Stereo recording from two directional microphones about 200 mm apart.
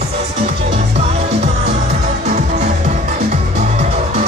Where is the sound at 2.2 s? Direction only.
35° right (ahead or behind).